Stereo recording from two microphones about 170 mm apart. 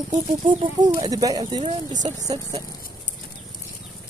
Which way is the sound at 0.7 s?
25° right (ahead or behind).